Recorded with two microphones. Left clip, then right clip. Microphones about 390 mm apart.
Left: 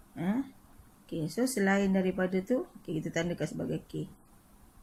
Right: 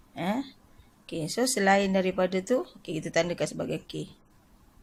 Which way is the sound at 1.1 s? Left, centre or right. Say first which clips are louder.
Right 3 dB; right.